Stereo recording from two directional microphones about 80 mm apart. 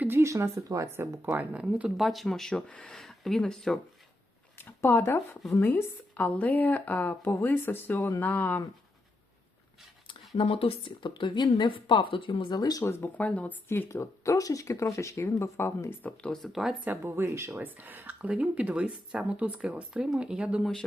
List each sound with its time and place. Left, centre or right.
0.2 s speech: right
1.3 s speech: centre
2.0 s speech: centre
3.0 s speech: centre
4.5 s a woman's voice: left
10.8 s speech: left
12.5 s speech: left
12.8 s speech: left
13.1 s a woman's voice: centre
13.7 s speech: left
16.3 s speech: centre
16.9 s speech: right; by 20.7 s centre